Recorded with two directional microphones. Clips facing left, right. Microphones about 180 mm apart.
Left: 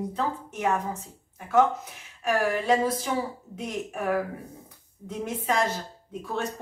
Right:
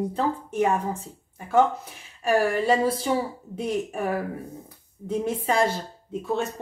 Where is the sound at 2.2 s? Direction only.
30° right (ahead or behind).